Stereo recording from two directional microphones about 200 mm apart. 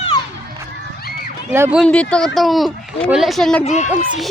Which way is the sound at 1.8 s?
5° left (ahead or behind).